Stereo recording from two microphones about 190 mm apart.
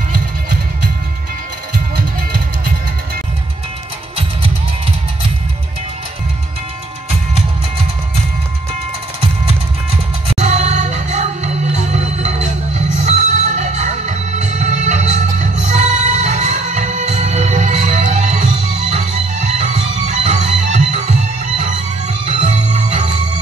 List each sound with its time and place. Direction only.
2.0 s music: 55° right (ahead or behind)
10.4 s music: 35° right (ahead or behind)